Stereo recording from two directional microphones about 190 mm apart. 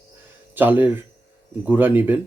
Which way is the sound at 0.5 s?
10° right (ahead or behind).